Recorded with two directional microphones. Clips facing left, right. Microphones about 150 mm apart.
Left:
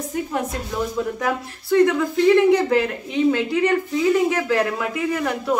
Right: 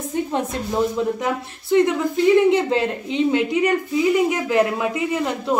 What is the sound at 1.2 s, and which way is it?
Speech, 20° right (ahead or behind).